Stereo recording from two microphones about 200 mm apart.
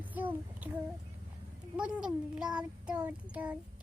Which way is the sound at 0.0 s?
10° right (ahead or behind).